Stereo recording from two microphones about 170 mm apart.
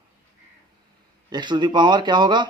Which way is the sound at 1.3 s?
25° right (ahead or behind).